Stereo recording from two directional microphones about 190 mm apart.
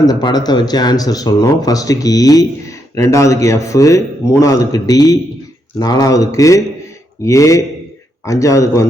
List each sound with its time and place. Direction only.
0.0 s speech: 20° left (ahead or behind)